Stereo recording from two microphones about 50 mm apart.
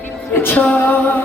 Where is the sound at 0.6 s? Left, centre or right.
Left.